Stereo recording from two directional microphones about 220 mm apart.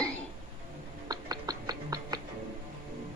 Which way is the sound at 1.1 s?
15° right (ahead or behind).